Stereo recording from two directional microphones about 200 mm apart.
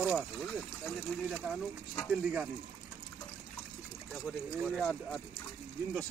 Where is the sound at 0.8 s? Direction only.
Centre (ahead or behind).